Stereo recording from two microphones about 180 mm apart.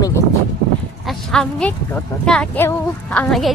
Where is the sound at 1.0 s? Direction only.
5° left (ahead or behind).